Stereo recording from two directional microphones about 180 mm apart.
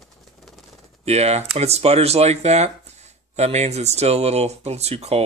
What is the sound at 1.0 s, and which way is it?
Speech, 35° right (ahead or behind).